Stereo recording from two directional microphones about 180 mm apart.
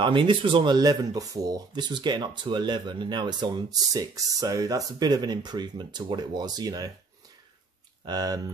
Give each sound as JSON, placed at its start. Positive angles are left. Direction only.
{"t": 0.0, "sound": "speech", "side_deg": -30}
{"t": 8.0, "sound": "speech", "side_deg": -20}